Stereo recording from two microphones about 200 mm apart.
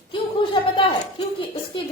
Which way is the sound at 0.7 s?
30° left (ahead or behind).